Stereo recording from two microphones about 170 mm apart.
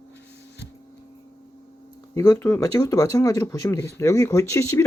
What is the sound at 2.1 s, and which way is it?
Speech, 15° left (ahead or behind).